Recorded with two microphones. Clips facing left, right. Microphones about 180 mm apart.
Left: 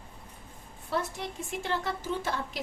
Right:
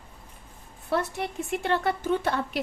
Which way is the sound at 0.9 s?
65° right (ahead or behind).